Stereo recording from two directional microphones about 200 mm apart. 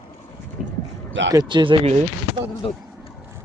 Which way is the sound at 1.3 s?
20° right (ahead or behind).